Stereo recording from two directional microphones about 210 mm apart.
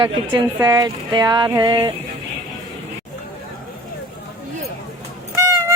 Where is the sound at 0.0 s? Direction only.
20° right (ahead or behind).